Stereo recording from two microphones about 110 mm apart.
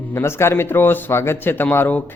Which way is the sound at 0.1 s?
25° left (ahead or behind).